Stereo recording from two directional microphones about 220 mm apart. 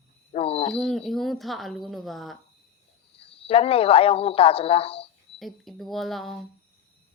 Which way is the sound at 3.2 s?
25° left (ahead or behind).